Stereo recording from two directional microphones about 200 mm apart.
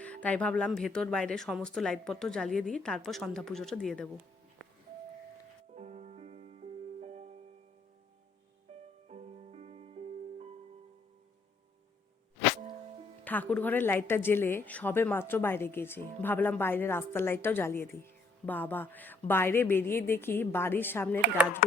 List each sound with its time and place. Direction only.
0.0 s speech: 5° left (ahead or behind)
5.7 s music: 35° right (ahead or behind)
8.7 s music: 35° right (ahead or behind)
13.2 s a woman's voice: 10° left (ahead or behind)